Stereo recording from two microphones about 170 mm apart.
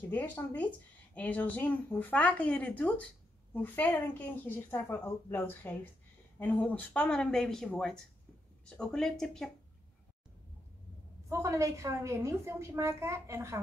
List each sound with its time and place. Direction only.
0.1 s a woman's voice: 10° left (ahead or behind)
11.2 s a woman's voice: 20° right (ahead or behind)